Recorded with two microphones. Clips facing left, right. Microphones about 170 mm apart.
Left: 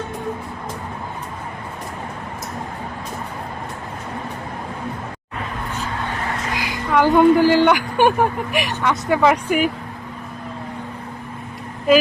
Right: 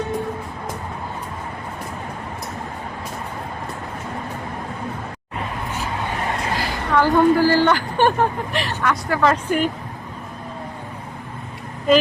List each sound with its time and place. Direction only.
6.6 s speech: 15° left (ahead or behind)